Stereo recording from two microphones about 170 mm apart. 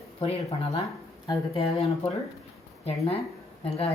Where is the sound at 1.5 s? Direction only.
35° left (ahead or behind).